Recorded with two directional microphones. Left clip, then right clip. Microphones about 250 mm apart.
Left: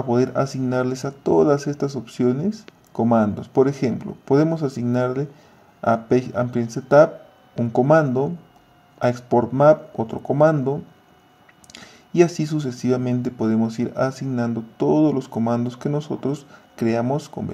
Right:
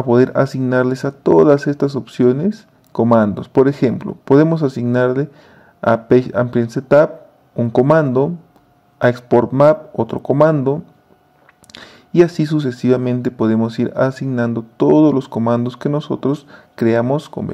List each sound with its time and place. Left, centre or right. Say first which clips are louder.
0.1 s speech: right 7 dB; right